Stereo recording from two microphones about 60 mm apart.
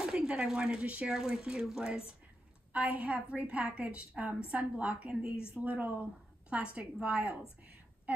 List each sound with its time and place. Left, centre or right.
0.0 s a woman's voice: centre
2.7 s a woman's voice: right
5.5 s a woman's voice: right